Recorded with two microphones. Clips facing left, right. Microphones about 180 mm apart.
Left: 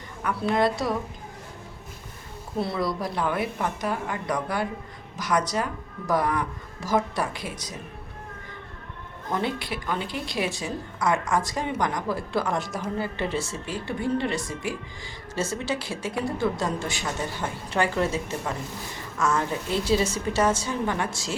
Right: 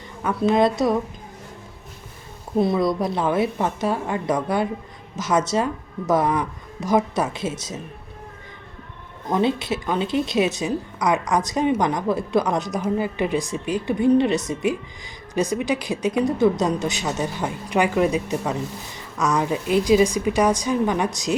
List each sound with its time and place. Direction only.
0.2 s speech: 20° right (ahead or behind)
2.6 s speech: 15° right (ahead or behind)
9.3 s a woman's voice: 20° right (ahead or behind)